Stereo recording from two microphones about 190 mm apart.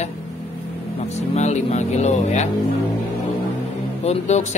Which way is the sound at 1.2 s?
35° left (ahead or behind).